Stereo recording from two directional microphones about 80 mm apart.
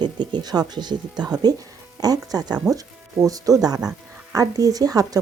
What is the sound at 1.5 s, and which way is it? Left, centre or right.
Speech, right.